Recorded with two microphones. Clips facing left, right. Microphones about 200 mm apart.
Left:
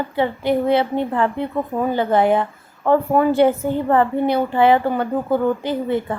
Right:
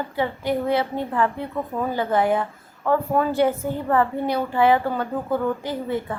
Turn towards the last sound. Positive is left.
turn(degrees=25)  # may be behind; listen again after turning